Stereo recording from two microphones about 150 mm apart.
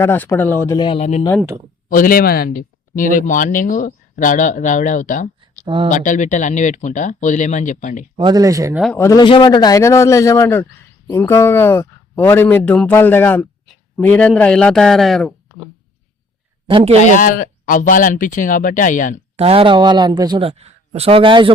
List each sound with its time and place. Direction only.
0.0 s a man's voice: 15° left (ahead or behind)
0.8 s speech: 35° left (ahead or behind)
1.9 s speech: 70° left (ahead or behind)
5.6 s a man's voice: 35° right (ahead or behind)
5.9 s speech: 55° left (ahead or behind)
8.1 s speech: 30° right (ahead or behind)
9.0 s a man's voice: 20° left (ahead or behind)
9.2 s a man's voice: 30° left (ahead or behind); by 15.7 s 5° left (ahead or behind)
16.6 s a man's voice: 40° right (ahead or behind)
17.0 s speech: 60° left (ahead or behind)
19.4 s speech: 40° right (ahead or behind)
20.5 s speech: 45° right (ahead or behind)